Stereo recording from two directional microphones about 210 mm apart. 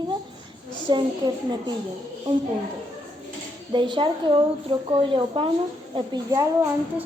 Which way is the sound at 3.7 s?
20° right (ahead or behind).